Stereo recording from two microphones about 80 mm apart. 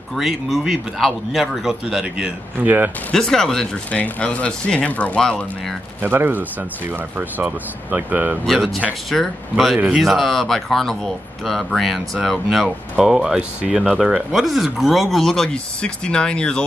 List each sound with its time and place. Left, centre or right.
0.1 s speech: centre
2.6 s speech: right
3.1 s speech: centre
5.9 s speech: right
8.5 s speech: centre
9.8 s speech: centre
10.0 s speech: centre